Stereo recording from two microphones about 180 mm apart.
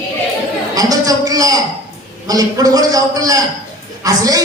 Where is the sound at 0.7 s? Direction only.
20° right (ahead or behind).